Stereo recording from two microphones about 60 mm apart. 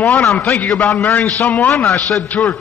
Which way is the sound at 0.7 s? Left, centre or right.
Left.